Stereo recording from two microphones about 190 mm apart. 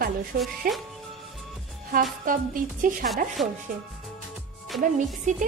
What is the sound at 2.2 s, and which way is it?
Speech, 45° right (ahead or behind).